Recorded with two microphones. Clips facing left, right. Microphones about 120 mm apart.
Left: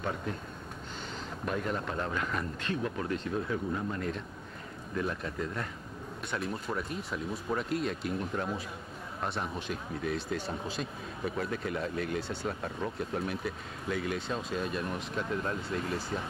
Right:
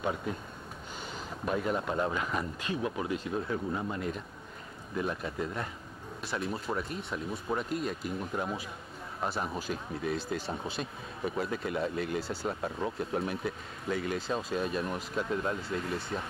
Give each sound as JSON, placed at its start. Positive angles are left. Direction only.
{"t": 0.0, "sound": "speech", "side_deg": -5}
{"t": 1.4, "sound": "speech", "side_deg": -5}